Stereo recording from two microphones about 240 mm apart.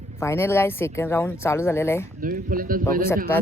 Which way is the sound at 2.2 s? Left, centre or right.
Right.